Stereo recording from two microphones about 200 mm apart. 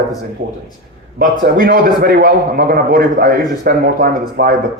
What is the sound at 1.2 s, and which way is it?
A man's voice, 45° right (ahead or behind).